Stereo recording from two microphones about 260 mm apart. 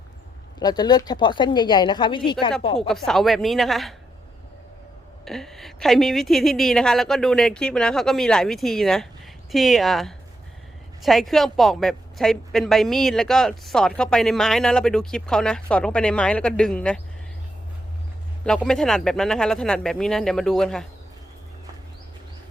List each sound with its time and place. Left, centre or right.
0.6 s a woman's voice: centre
2.7 s a woman's voice: centre
5.2 s a woman's voice: centre
18.4 s a woman's voice: centre